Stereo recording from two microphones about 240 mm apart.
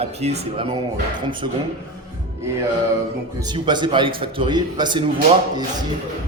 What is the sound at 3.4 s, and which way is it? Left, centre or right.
A man's voice, centre.